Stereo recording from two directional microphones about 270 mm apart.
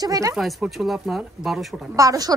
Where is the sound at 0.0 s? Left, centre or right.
Centre.